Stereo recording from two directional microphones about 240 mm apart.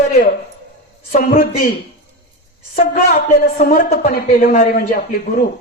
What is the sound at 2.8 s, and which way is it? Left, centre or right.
A woman's voice, left.